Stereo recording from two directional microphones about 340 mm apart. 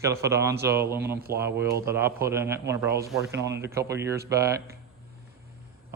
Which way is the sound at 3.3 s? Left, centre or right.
Right.